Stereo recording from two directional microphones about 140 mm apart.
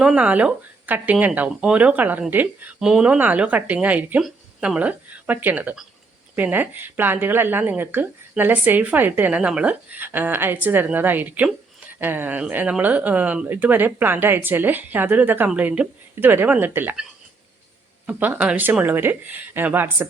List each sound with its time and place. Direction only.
0.0 s a woman's voice: 10° right (ahead or behind)